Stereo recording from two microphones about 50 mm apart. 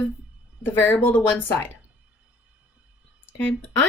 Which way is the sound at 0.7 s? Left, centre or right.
Left.